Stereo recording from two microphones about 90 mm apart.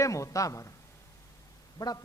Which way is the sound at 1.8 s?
50° left (ahead or behind).